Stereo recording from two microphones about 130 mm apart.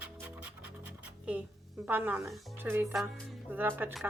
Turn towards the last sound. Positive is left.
turn(degrees=-15)  # may be behind; listen again after turning